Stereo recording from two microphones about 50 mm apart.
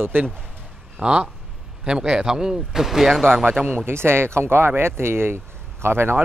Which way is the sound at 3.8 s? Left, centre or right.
Right.